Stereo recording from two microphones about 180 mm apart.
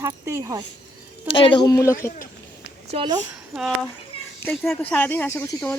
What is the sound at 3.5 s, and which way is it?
Speech, centre (ahead or behind).